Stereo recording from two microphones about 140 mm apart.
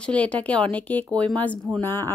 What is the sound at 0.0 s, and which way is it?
A woman's voice, 10° left (ahead or behind).